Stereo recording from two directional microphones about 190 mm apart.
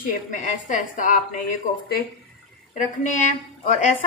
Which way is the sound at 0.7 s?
45° left (ahead or behind).